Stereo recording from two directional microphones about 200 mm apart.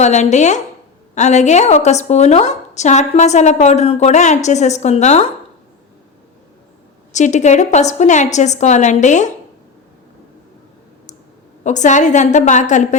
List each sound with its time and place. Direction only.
0.0 s a woman's voice: 35° left (ahead or behind)
7.1 s a woman's voice: 35° left (ahead or behind)
11.6 s a woman's voice: 35° left (ahead or behind)